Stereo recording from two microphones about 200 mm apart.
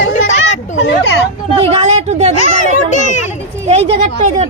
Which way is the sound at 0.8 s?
60° left (ahead or behind).